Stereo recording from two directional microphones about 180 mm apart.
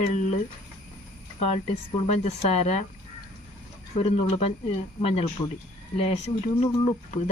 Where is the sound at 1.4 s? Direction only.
35° left (ahead or behind).